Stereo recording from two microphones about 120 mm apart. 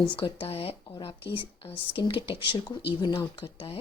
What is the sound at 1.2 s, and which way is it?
Speech, 15° right (ahead or behind).